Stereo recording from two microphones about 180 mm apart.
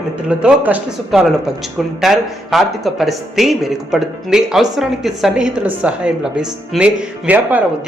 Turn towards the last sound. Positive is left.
turn(degrees=-10)  # may be behind; listen again after turning